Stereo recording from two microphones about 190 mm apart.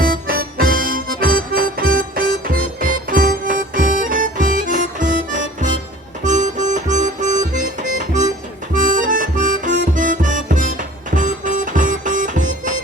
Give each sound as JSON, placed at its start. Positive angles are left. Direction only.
{"t": 0.0, "sound": "music", "side_deg": -50}